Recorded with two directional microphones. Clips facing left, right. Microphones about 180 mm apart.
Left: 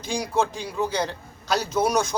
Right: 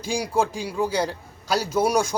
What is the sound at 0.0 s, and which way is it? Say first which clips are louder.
A man's voice: right 1 dB; 10° right (ahead or behind).